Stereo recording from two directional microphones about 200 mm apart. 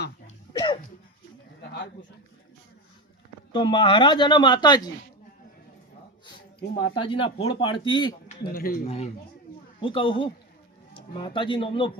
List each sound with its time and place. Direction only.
0.5 s cough: 20° left (ahead or behind)
3.5 s speech: 25° left (ahead or behind)
6.9 s speech: 25° left (ahead or behind)
8.4 s speech: 50° left (ahead or behind)
8.9 s speech: 30° left (ahead or behind)